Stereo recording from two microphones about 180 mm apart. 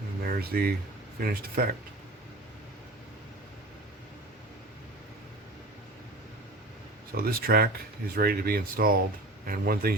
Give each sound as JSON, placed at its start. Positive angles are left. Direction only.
{"t": 0.3, "sound": "speech", "side_deg": -55}
{"t": 7.1, "sound": "speech", "side_deg": -55}